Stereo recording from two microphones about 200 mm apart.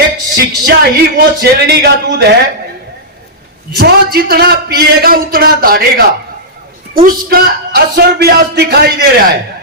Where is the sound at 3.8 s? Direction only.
50° right (ahead or behind).